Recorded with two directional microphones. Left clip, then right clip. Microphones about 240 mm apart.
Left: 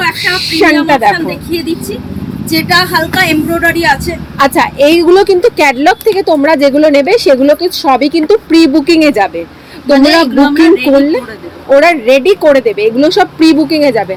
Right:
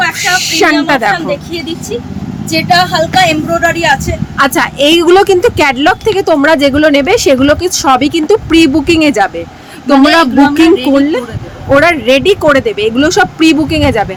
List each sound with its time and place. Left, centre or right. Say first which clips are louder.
0.0 s speech: right 1 dB; centre
2.5 s speech: even; centre
4.4 s a woman's voice: left 2 dB; centre
11.8 s a woman's voice: left 1 dB; centre